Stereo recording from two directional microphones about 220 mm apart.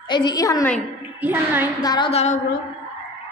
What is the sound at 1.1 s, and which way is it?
Speech, 10° right (ahead or behind).